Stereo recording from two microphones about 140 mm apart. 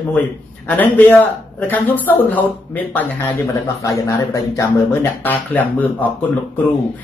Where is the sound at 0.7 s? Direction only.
10° left (ahead or behind).